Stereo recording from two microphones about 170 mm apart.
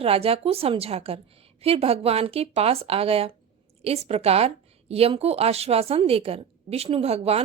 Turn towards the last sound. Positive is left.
turn(degrees=-35)  # may be behind; listen again after turning